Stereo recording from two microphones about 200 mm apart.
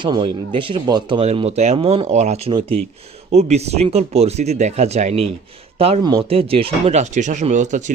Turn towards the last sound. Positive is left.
turn(degrees=-35)  # may be behind; listen again after turning